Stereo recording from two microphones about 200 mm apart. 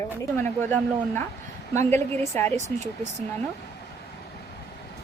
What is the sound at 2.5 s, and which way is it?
Speech, 35° right (ahead or behind).